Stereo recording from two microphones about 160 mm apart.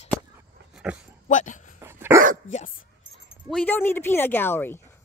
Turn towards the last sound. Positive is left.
turn(degrees=15)  # may be behind; listen again after turning